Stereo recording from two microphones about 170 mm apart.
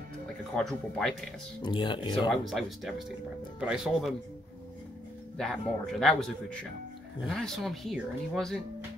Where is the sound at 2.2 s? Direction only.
Centre (ahead or behind).